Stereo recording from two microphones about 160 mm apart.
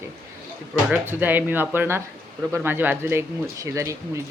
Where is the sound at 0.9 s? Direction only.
10° right (ahead or behind).